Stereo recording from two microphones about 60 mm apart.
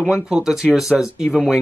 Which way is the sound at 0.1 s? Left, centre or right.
Centre.